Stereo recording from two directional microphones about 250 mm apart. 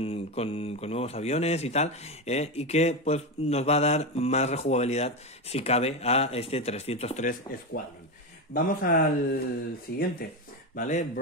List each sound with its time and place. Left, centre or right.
0.0 s a man's voice: left